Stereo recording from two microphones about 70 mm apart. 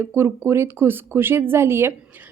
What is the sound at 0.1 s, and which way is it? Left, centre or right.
A woman's voice, right.